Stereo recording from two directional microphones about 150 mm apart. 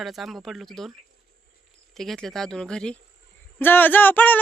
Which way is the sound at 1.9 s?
Centre (ahead or behind).